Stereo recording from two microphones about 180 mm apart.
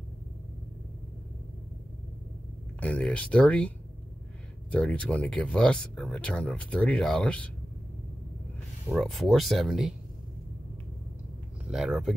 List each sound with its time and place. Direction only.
2.8 s speech: 5° left (ahead or behind)
8.8 s speech: centre (ahead or behind)
11.7 s speech: centre (ahead or behind)